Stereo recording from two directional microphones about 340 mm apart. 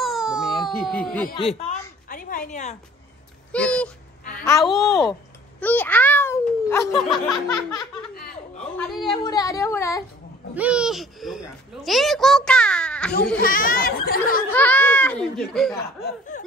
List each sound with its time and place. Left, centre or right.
0.0 s a child's voice: centre
2.0 s a sound: left
3.5 s a child's voice: centre
7.4 s a sound: centre
8.1 s chuckle: left
8.7 s a child's voice: centre
10.5 s a child's voice: centre
13.4 s speech: left
14.5 s speech: centre
16.0 s speech: left